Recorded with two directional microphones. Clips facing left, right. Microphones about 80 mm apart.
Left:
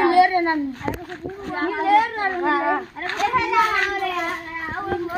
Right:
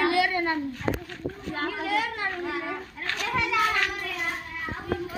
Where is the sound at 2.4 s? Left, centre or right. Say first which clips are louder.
Left 11 dB; left.